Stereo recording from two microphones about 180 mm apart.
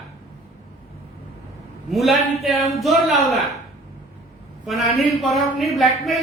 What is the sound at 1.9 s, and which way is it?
Speech, centre (ahead or behind).